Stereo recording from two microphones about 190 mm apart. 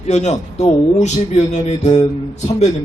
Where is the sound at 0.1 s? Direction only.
35° left (ahead or behind).